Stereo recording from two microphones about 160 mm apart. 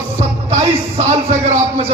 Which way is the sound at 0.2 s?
45° right (ahead or behind).